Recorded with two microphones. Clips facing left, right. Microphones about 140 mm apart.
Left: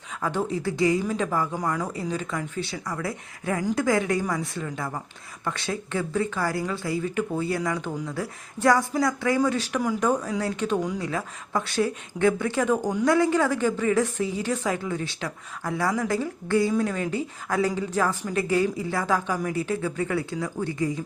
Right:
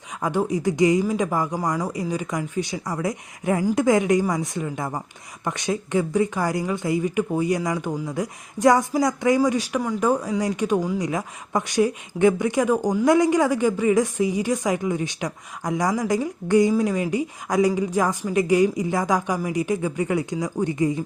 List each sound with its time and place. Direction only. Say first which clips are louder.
0.2 s a woman's voice: right 4 dB; 15° right (ahead or behind)